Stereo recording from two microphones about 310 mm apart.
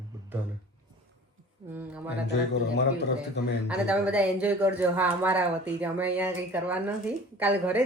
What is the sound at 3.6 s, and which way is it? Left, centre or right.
A woman's voice, centre.